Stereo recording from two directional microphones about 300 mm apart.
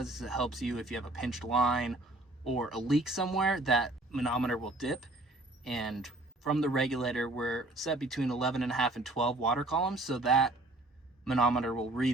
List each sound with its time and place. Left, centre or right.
0.0 s speech: centre